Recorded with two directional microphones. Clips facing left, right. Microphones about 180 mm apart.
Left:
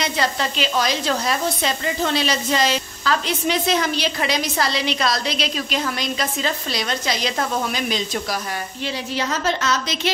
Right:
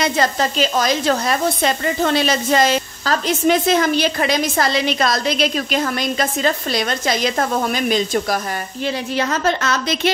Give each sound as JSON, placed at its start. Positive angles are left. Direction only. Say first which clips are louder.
{"t": 0.0, "sound": "a woman's voice", "louder": "right 4 dB", "side_deg": -45}